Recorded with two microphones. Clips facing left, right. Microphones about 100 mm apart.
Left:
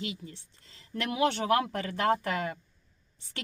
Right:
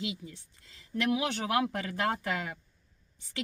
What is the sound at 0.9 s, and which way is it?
Speech, 45° left (ahead or behind).